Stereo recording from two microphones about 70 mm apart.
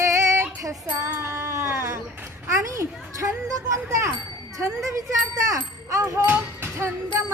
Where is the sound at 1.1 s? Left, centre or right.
Right.